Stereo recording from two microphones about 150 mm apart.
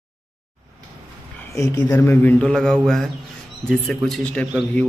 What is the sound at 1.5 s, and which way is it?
A man's voice, 20° left (ahead or behind).